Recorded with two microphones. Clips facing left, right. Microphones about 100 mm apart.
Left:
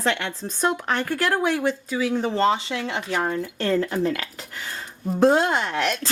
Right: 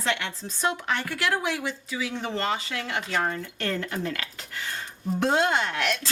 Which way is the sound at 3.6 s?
35° left (ahead or behind).